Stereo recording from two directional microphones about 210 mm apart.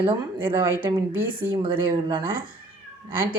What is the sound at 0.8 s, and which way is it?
Speech, 25° right (ahead or behind).